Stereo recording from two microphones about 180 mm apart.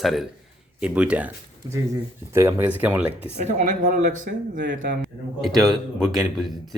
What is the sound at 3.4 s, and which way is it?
Speech, 45° right (ahead or behind).